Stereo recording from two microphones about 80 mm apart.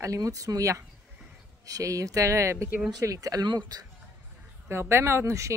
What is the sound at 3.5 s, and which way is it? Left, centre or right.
Speech, right.